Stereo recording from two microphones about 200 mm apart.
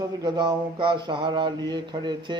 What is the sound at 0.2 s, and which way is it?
Mantra, 20° right (ahead or behind).